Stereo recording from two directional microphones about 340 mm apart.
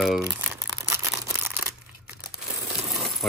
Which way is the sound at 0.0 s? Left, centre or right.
Centre.